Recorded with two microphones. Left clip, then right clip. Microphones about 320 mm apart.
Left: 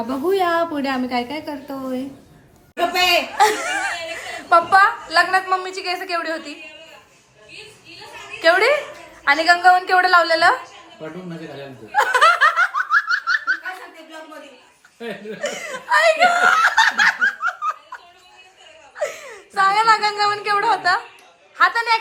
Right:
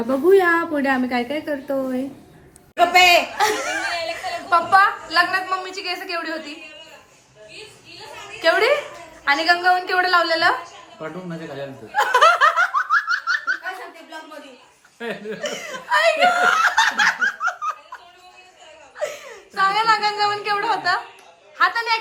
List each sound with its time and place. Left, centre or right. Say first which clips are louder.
0.3 s a woman's voice: right 2 dB; left
2.9 s a woman's voice: right 4 dB; centre
8.4 s a woman's voice: left 2 dB; centre
11.9 s laughter: even; centre
14.9 s snicker: right 1 dB; centre
18.9 s a woman's voice: left 2 dB; centre